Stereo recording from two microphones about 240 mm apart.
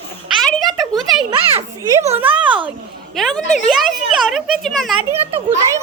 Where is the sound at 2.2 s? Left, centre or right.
Centre.